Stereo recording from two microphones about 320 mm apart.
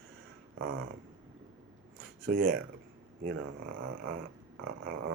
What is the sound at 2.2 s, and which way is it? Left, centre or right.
Dog, right.